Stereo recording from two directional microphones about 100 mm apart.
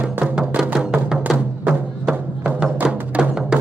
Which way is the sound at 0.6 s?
10° right (ahead or behind).